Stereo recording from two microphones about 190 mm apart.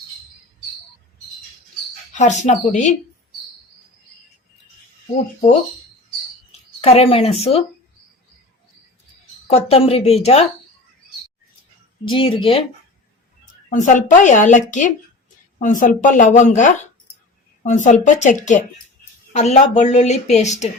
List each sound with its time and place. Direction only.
2.1 s a woman's voice: 40° left (ahead or behind)
6.5 s a woman's voice: 30° left (ahead or behind)
9.5 s a woman's voice: 30° left (ahead or behind)
12.0 s speech: 25° left (ahead or behind)
13.7 s a woman's voice: 40° left (ahead or behind)